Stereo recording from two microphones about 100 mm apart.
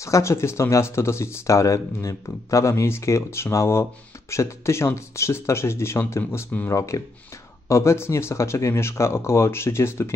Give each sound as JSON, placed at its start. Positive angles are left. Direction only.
{"t": 0.0, "sound": "speech", "side_deg": 30}